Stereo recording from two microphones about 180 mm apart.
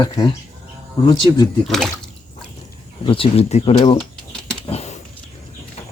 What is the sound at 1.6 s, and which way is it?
Speech, centre (ahead or behind).